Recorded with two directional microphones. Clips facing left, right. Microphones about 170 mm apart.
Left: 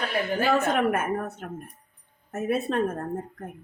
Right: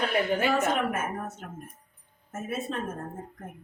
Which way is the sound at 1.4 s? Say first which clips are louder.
Left 5 dB; 55° left (ahead or behind).